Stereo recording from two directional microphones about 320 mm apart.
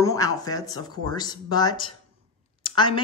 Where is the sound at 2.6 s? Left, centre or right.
Centre.